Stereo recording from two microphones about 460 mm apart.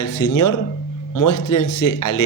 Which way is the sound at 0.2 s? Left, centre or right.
Left.